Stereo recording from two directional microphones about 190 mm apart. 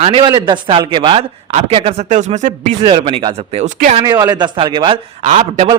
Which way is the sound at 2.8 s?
25° right (ahead or behind).